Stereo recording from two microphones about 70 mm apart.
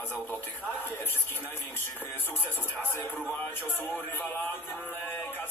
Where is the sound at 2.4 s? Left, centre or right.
Left.